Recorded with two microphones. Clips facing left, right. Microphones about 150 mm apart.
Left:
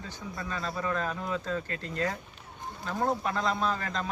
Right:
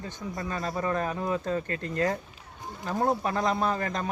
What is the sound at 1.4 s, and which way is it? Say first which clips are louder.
Speech: right 4 dB; 50° right (ahead or behind).